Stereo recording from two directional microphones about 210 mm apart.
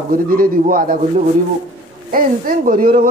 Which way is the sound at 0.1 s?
40° right (ahead or behind).